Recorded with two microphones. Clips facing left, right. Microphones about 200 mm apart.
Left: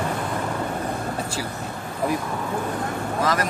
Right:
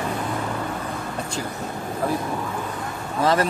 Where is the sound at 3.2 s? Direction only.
30° right (ahead or behind).